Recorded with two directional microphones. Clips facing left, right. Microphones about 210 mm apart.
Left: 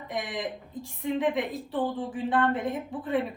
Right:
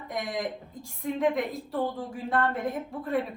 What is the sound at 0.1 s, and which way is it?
A woman's voice, centre (ahead or behind).